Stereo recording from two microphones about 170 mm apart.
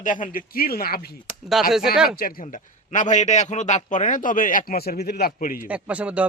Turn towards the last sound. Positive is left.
turn(degrees=-5)  # may be behind; listen again after turning